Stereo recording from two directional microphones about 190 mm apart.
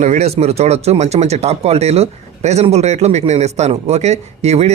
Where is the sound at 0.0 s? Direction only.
35° right (ahead or behind).